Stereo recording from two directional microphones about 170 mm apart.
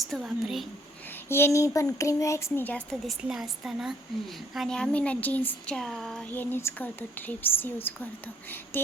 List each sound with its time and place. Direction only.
0.1 s a woman's voice: centre (ahead or behind)
1.1 s speech: 15° left (ahead or behind)
3.2 s a woman's voice: 5° right (ahead or behind)